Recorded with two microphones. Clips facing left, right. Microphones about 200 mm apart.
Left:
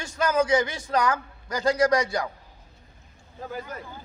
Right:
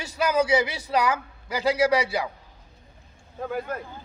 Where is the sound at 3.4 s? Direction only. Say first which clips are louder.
Right 5 dB; 60° right (ahead or behind).